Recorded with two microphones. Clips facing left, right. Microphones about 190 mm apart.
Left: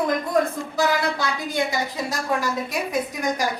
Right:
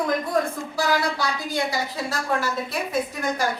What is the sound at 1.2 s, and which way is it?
Speech, 20° left (ahead or behind).